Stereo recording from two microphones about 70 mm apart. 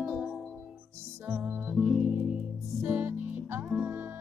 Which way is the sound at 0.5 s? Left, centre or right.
Right.